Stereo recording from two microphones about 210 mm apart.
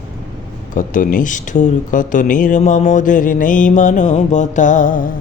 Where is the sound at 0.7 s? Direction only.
40° left (ahead or behind).